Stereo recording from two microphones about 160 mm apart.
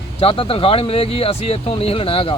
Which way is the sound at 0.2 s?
35° left (ahead or behind).